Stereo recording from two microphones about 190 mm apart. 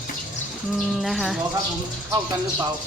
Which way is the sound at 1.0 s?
Centre (ahead or behind).